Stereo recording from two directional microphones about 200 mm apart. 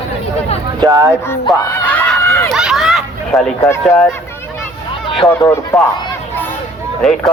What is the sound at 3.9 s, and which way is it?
Speech, 5° left (ahead or behind).